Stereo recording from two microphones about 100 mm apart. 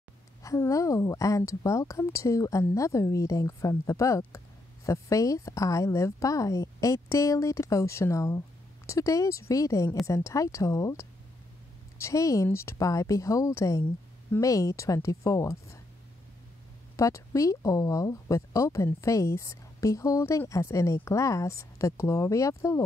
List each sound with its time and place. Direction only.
0.4 s speech: 35° left (ahead or behind)
16.9 s speech: 35° left (ahead or behind)